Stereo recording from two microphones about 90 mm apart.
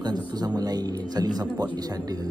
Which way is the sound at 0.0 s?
50° right (ahead or behind).